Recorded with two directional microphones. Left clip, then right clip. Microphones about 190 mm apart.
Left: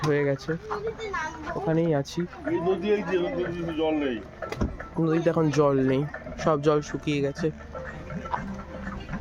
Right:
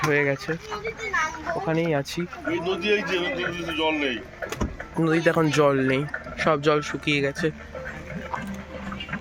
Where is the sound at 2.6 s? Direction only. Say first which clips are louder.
Right 1 dB; 45° left (ahead or behind).